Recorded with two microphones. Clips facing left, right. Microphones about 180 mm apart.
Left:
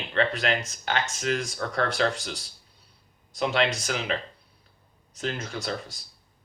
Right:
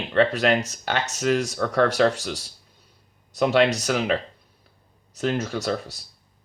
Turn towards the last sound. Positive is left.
turn(degrees=-40)  # may be behind; listen again after turning